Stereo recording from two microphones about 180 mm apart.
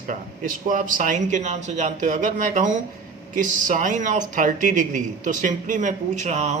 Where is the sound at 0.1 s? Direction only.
45° right (ahead or behind).